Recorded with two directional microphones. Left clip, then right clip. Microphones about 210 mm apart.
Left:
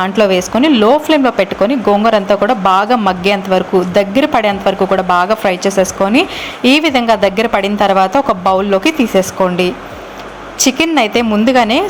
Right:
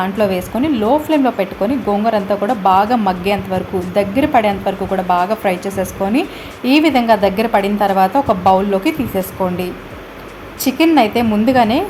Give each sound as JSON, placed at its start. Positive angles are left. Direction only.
{"t": 0.0, "sound": "a woman's voice", "side_deg": 15}
{"t": 10.6, "sound": "a woman's voice", "side_deg": 15}